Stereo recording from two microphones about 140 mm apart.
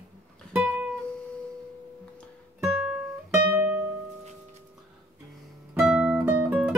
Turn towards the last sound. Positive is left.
turn(degrees=-10)  # may be behind; listen again after turning